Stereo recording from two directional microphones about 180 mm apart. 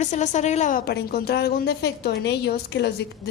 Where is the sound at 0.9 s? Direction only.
60° left (ahead or behind).